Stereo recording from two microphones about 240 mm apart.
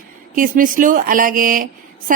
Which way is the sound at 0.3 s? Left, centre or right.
Right.